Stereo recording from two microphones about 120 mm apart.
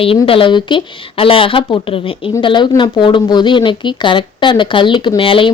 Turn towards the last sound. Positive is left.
turn(degrees=45)  # may be behind; listen again after turning